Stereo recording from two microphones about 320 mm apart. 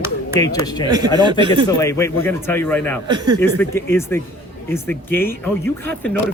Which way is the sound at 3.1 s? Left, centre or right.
Centre.